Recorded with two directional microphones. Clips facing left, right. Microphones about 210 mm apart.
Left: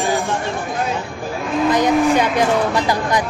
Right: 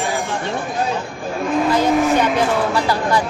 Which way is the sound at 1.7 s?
15° left (ahead or behind).